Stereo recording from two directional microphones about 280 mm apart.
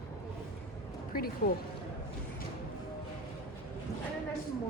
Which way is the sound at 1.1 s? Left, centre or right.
Left.